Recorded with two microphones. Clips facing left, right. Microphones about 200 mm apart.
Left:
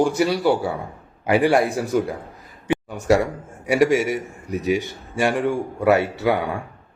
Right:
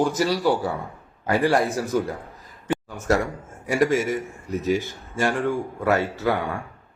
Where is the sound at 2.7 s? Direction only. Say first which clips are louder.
Left 4 dB; 15° left (ahead or behind).